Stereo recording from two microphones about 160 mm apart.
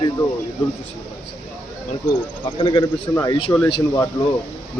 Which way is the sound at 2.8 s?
20° left (ahead or behind).